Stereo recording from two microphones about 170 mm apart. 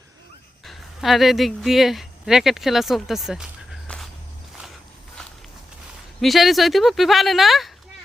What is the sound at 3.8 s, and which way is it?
Walk, 5° left (ahead or behind).